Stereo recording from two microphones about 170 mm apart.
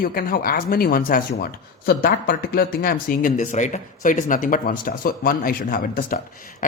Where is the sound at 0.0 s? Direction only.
60° left (ahead or behind).